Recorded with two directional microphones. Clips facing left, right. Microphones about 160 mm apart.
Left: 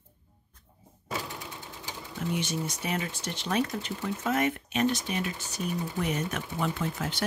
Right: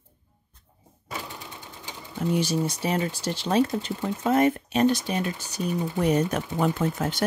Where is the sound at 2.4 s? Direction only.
35° right (ahead or behind).